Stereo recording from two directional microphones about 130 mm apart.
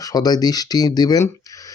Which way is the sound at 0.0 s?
30° left (ahead or behind).